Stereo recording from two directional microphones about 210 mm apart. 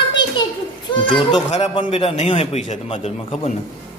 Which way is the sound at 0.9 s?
25° left (ahead or behind).